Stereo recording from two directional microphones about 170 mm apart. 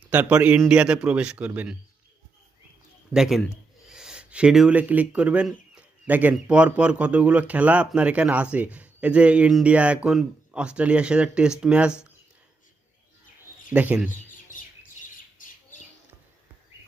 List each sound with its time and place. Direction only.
0.1 s speech: 10° right (ahead or behind)
3.1 s speech: centre (ahead or behind)
13.7 s speech: 10° right (ahead or behind)
15.4 s squawk: 50° left (ahead or behind)